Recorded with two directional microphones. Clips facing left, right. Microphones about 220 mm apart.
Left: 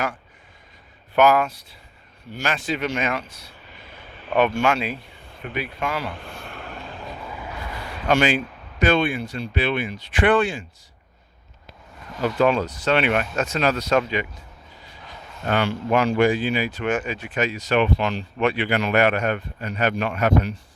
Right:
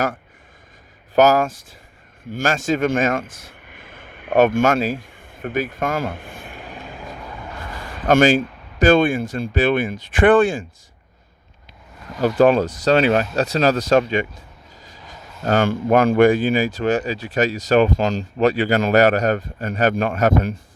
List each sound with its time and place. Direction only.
1.1 s speech: 45° right (ahead or behind)
6.5 s vehicle: 15° right (ahead or behind)
6.9 s vehicle: centre (ahead or behind)
7.6 s a sound: 50° right (ahead or behind)
8.8 s speech: 50° right (ahead or behind)
12.2 s speech: 45° right (ahead or behind)
15.4 s speech: 45° right (ahead or behind)